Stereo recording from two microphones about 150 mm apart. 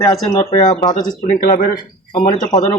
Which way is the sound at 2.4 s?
25° left (ahead or behind).